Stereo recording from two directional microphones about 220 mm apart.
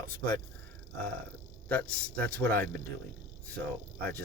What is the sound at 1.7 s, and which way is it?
Speech, 5° left (ahead or behind).